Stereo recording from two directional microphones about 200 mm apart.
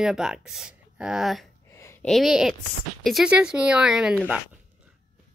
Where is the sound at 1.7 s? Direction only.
15° left (ahead or behind).